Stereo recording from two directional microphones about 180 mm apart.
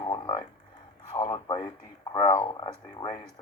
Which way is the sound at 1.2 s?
25° left (ahead or behind).